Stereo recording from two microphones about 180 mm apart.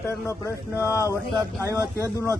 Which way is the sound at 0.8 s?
15° left (ahead or behind).